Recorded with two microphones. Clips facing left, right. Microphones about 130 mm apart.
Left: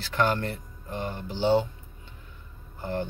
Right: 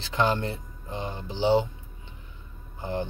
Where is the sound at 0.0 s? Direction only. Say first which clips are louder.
Even; 20° right (ahead or behind).